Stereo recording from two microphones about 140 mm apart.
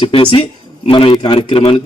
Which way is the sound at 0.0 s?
35° left (ahead or behind).